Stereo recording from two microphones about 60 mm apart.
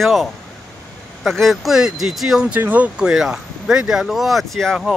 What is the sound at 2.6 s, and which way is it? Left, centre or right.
Speech, right.